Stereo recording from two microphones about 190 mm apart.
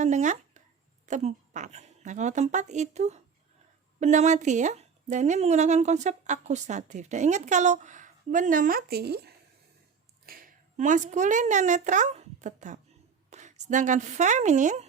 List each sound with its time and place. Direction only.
0.0 s a woman's voice: 40° right (ahead or behind)